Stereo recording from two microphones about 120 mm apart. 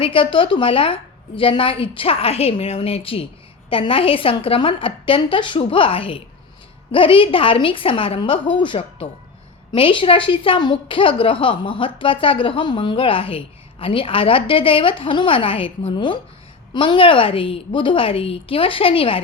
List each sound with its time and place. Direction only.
0.0 s a woman's voice: 45° left (ahead or behind)